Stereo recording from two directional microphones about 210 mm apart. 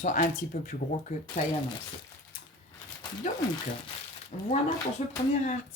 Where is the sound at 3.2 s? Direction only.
35° left (ahead or behind).